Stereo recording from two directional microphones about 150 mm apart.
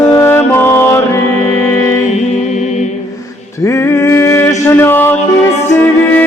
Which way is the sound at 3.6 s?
20° left (ahead or behind).